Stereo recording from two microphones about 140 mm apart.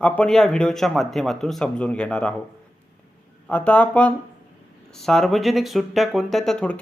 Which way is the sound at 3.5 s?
10° left (ahead or behind).